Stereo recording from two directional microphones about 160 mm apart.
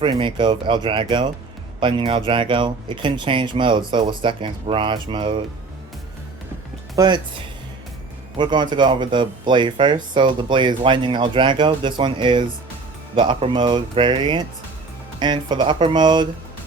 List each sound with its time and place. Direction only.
0.0 s speech: 30° right (ahead or behind)
6.9 s speech: 25° right (ahead or behind)
8.4 s speech: 30° right (ahead or behind)